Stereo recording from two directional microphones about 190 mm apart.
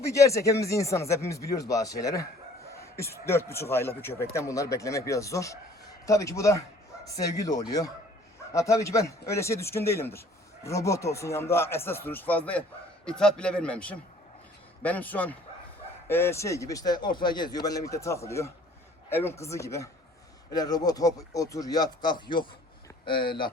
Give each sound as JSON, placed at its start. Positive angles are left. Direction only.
{"t": 0.0, "sound": "a man's voice", "side_deg": 15}